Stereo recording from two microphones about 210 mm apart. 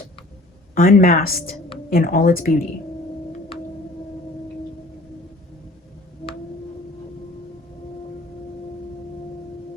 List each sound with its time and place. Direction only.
0.8 s speech: 40° left (ahead or behind)